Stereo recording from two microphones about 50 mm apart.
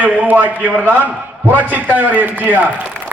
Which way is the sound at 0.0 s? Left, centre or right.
Right.